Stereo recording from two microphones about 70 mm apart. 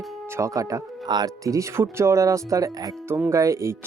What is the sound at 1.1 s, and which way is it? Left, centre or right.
Speech, right.